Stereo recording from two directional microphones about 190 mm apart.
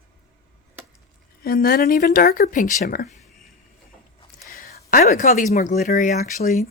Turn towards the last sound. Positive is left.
turn(degrees=45)  # may be behind; listen again after turning